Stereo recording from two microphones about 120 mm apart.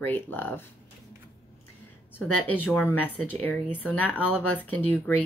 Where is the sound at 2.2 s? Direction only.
15° left (ahead or behind).